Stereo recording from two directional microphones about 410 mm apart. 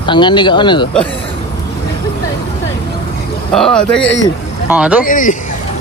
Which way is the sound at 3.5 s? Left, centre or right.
Centre.